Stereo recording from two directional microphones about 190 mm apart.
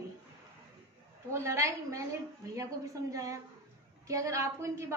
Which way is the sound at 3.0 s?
15° right (ahead or behind).